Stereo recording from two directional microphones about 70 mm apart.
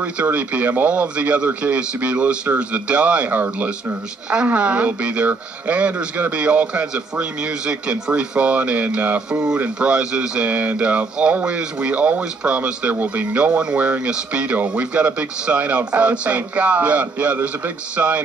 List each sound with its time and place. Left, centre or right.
0.0 s speech: centre